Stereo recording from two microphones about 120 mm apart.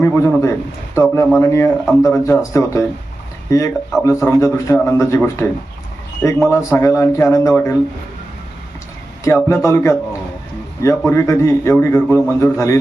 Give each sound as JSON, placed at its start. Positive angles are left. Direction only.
{"t": 0.0, "sound": "speech", "side_deg": 20}
{"t": 9.2, "sound": "speech", "side_deg": 25}